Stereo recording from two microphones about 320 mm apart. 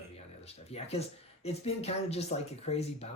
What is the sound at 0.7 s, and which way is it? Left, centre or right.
Speech, centre.